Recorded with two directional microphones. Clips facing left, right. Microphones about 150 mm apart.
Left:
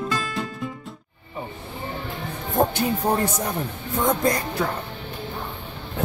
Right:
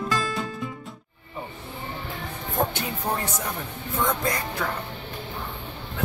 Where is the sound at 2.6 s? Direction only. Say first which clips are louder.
Left 5 dB; 35° left (ahead or behind).